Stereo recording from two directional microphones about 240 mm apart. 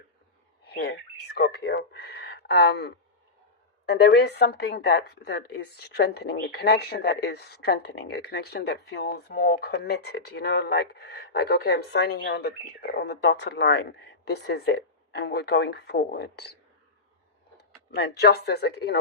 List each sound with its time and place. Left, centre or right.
0.6 s a woman's voice: left
17.9 s a woman's voice: left